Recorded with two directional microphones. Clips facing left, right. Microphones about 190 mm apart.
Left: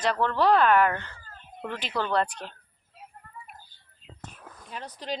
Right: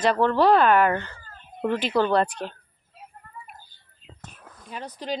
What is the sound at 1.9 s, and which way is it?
Speech, 30° right (ahead or behind).